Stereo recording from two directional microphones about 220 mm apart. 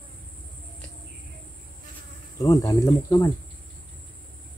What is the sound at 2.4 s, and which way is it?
Speech, 15° left (ahead or behind).